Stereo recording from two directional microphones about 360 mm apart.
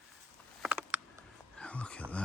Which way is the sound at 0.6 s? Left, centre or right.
Centre.